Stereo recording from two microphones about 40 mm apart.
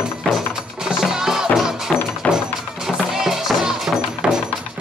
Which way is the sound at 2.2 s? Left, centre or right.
Left.